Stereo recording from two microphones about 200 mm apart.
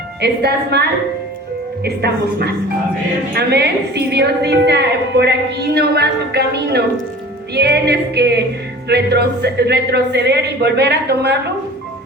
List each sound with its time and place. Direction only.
0.2 s a woman's voice: 55° right (ahead or behind)